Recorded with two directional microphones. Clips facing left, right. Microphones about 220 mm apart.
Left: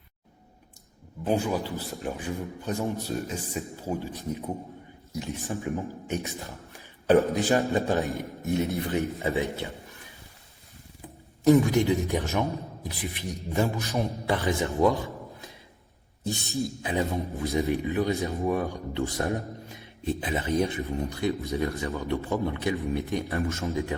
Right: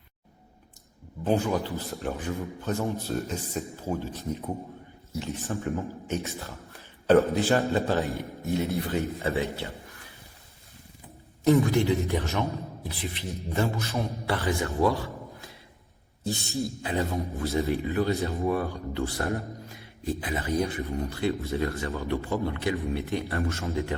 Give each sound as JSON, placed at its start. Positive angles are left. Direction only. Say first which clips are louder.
{"t": 1.2, "sound": "a man's voice", "louder": "right 1 dB", "side_deg": 10}
{"t": 11.4, "sound": "a man's voice", "louder": "left 2 dB", "side_deg": 15}
{"t": 16.5, "sound": "a man's voice", "louder": "left 2 dB", "side_deg": 15}